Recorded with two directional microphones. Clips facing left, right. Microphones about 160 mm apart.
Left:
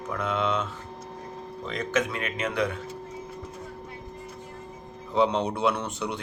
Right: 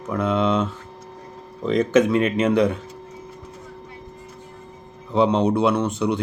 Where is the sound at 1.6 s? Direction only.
25° right (ahead or behind).